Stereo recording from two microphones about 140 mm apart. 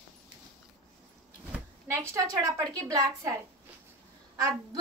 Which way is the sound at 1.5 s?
20° right (ahead or behind).